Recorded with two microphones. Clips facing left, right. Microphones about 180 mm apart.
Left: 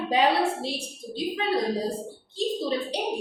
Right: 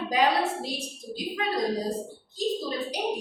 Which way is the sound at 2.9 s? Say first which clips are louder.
Left 1 dB; 30° left (ahead or behind).